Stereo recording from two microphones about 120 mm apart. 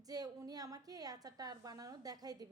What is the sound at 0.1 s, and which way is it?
A woman's voice, 30° right (ahead or behind).